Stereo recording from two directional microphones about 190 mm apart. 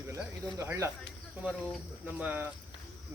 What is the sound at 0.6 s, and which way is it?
Speech, 15° right (ahead or behind).